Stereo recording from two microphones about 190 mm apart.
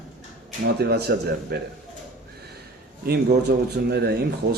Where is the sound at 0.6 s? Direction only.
60° right (ahead or behind).